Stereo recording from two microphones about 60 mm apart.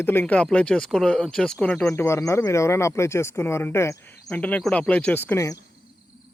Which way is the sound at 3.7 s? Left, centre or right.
Left.